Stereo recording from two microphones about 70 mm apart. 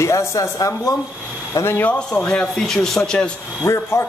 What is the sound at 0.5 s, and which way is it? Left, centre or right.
Speech, left.